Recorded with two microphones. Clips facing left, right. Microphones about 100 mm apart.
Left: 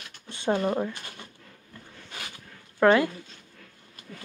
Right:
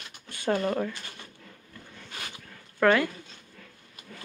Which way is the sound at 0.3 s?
25° left (ahead or behind).